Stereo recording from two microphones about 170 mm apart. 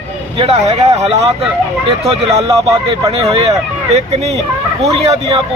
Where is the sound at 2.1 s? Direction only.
35° right (ahead or behind).